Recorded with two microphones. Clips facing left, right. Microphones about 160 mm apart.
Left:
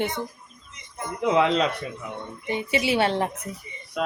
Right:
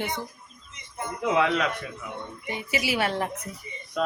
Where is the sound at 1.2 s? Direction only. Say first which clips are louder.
Left 3 dB; 25° left (ahead or behind).